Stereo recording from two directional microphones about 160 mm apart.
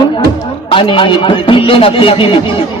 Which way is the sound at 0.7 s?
30° left (ahead or behind).